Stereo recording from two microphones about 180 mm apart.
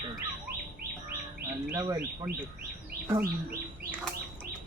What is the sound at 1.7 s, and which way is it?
Speech, 20° right (ahead or behind).